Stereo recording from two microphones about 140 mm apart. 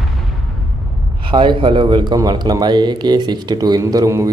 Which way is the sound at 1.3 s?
35° right (ahead or behind).